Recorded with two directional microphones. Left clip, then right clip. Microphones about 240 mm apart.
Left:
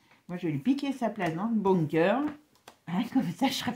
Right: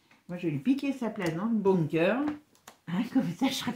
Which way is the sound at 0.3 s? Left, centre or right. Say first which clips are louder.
Even; left.